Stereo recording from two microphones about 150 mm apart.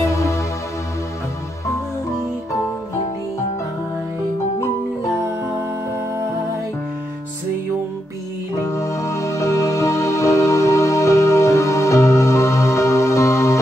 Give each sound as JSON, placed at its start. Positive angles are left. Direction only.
{"t": 0.0, "sound": "music", "side_deg": 20}
{"t": 8.6, "sound": "music", "side_deg": 20}